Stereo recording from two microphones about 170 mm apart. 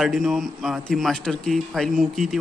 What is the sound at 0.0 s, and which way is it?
A man's voice, centre (ahead or behind).